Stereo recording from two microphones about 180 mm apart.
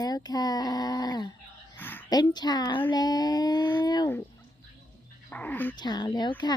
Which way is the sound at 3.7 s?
25° left (ahead or behind).